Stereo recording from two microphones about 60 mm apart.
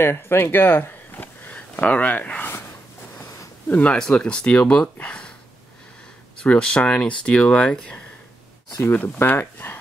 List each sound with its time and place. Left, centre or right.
0.0 s speech: left
3.2 s a sound: left
3.6 s speech: left
6.3 s speech: centre
8.9 s speech: left